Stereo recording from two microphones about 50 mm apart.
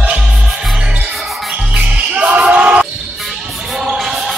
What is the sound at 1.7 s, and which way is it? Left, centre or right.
Basketball bounce, right.